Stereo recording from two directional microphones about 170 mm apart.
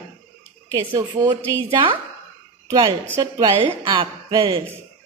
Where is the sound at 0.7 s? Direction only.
20° right (ahead or behind).